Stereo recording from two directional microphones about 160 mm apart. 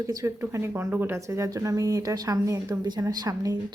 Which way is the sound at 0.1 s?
20° right (ahead or behind).